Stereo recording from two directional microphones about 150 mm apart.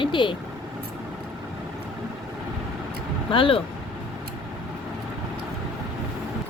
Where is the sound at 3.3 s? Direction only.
35° left (ahead or behind).